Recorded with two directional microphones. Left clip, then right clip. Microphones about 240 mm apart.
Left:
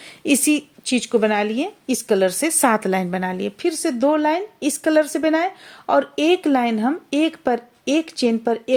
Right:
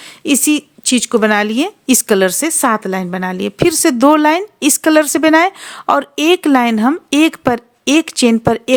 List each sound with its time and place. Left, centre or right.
0.0 s a woman's voice: centre